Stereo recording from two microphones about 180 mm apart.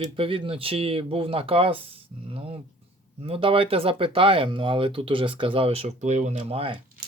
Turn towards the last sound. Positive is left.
turn(degrees=-30)  # may be behind; listen again after turning